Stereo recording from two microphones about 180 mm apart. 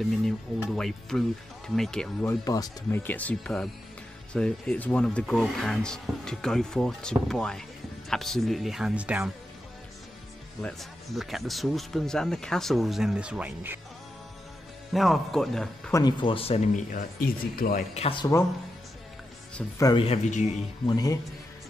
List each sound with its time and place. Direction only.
0.7 s speech: centre (ahead or behind)
2.2 s speech: 20° left (ahead or behind); by 9.3 s 5° right (ahead or behind)
10.6 s speech: centre (ahead or behind)
14.9 s speech: centre (ahead or behind)
15.9 s speech: 20° left (ahead or behind); by 17.8 s 50° left (ahead or behind)
17.9 s speech: 35° left (ahead or behind)
19.8 s speech: 25° left (ahead or behind)
20.8 s speech: 20° left (ahead or behind)